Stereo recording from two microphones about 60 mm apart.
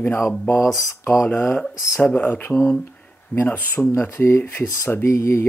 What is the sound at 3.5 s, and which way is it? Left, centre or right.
Speech, left.